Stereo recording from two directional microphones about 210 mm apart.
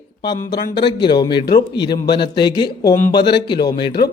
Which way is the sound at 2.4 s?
20° left (ahead or behind).